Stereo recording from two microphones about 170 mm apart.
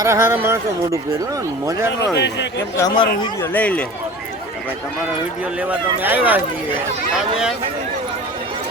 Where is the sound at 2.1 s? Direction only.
90° left.